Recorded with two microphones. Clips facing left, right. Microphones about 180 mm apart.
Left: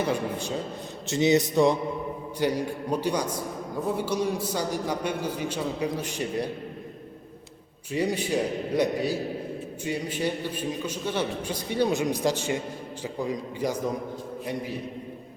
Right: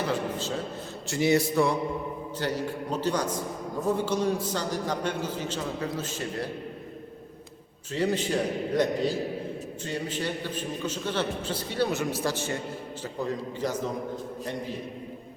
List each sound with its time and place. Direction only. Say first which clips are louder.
0.1 s a man's voice: left 1 dB; 15° left (ahead or behind)
7.9 s a man's voice: left 1 dB; 10° left (ahead or behind)